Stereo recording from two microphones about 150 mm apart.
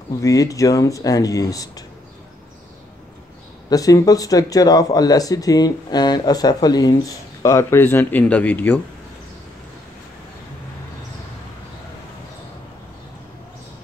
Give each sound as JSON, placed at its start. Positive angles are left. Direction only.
{"t": 0.2, "sound": "speech", "side_deg": 20}
{"t": 3.7, "sound": "speech", "side_deg": 25}